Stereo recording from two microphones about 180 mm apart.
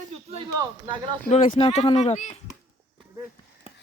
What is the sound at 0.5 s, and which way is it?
Speech, 20° right (ahead or behind).